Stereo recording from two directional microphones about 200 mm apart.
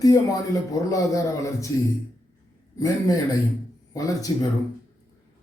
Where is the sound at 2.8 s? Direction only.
15° left (ahead or behind).